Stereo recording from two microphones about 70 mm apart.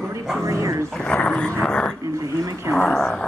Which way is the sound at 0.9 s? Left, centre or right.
Centre.